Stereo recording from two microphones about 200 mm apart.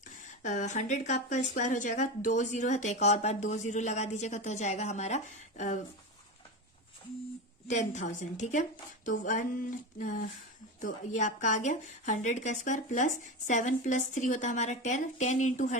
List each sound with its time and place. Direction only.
0.0 s a woman's voice: 40° left (ahead or behind)
7.7 s a woman's voice: 35° left (ahead or behind)